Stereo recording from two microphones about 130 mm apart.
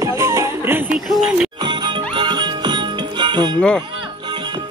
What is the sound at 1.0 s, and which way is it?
Music, centre (ahead or behind).